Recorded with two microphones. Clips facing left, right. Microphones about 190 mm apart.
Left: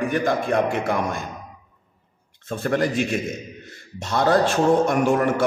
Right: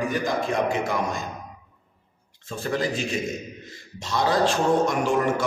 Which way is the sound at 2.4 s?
55° left (ahead or behind).